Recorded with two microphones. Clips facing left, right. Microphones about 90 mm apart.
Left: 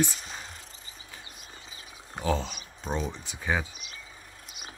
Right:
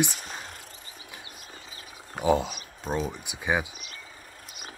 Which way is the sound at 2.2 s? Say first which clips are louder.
Right 5 dB; 15° right (ahead or behind).